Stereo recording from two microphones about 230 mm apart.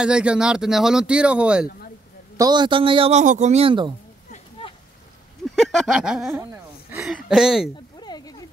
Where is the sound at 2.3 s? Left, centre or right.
Centre.